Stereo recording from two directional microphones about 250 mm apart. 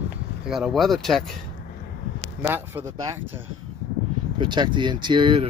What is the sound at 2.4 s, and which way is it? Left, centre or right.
Speech, centre.